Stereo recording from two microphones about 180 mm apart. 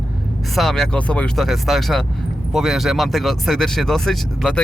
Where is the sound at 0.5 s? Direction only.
Centre (ahead or behind).